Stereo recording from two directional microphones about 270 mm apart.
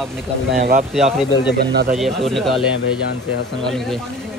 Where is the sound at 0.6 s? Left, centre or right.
Right.